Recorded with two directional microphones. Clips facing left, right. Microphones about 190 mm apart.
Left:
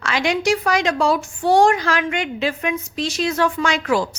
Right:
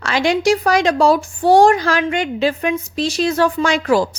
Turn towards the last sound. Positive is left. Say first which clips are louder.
# right 4 dB
turn(degrees=-35)  # may be behind; listen again after turning